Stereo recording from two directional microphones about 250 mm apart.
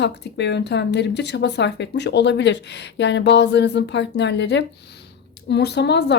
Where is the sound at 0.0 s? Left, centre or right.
Left.